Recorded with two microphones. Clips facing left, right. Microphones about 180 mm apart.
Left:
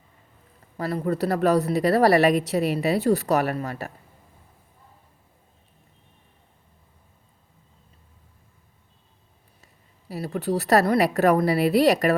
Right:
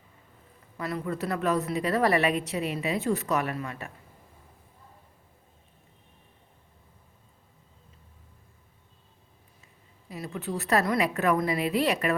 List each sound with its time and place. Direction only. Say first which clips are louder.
0.8 s a woman's voice: left 6 dB; 35° left (ahead or behind)
10.1 s a woman's voice: left 8 dB; 35° left (ahead or behind)